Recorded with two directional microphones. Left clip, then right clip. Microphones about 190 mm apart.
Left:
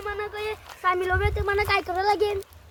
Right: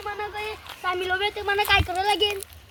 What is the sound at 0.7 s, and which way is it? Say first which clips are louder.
Speech: left 3 dB; 5° left (ahead or behind).